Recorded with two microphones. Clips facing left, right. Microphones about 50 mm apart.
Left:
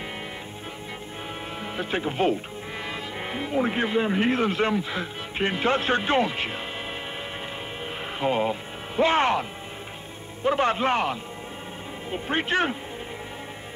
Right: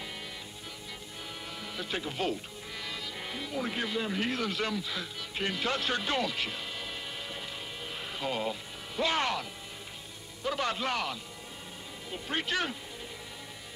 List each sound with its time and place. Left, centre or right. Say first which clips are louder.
1.6 s speech: left 8 dB; left
8.2 s a man's voice: left 9 dB; left